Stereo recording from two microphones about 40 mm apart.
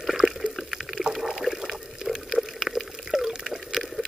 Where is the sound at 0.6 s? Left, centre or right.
Centre.